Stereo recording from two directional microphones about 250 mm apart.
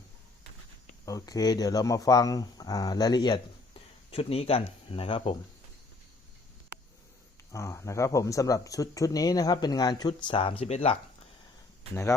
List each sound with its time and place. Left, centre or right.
1.0 s speech: centre
7.5 s speech: centre